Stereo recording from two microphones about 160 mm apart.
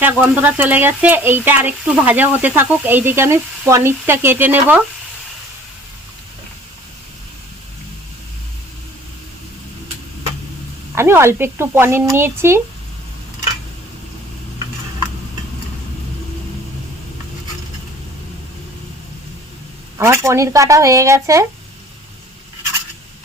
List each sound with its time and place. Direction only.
0.0 s speech: 10° right (ahead or behind)
10.9 s speech: 15° right (ahead or behind)
20.0 s speech: 15° right (ahead or behind)